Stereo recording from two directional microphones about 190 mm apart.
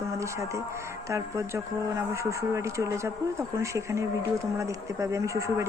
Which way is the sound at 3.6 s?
15° right (ahead or behind).